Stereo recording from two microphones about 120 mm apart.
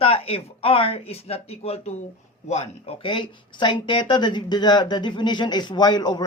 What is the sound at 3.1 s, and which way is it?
Speech, 40° left (ahead or behind).